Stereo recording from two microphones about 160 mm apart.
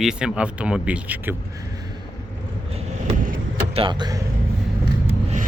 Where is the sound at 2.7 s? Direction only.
40° right (ahead or behind).